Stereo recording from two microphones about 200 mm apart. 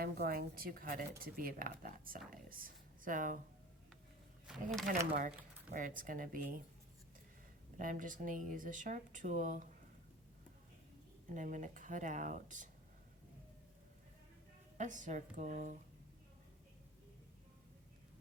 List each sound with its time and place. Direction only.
0.0 s a woman's voice: 50° right (ahead or behind)
4.4 s speech: centre (ahead or behind)
4.9 s a woman's voice: 45° right (ahead or behind)
7.8 s speech: 40° right (ahead or behind)
11.3 s speech: 40° right (ahead or behind)
14.8 s speech: 40° right (ahead or behind)